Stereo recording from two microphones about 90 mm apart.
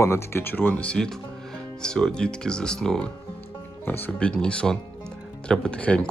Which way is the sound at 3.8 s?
25° left (ahead or behind).